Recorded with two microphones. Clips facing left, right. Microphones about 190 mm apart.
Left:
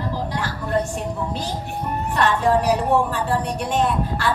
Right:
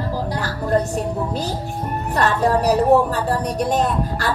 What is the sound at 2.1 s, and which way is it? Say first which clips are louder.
Speech: right 1 dB; 40° right (ahead or behind).